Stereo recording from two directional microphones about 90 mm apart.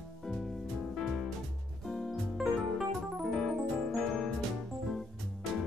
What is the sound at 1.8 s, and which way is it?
Keyboard, 5° left (ahead or behind).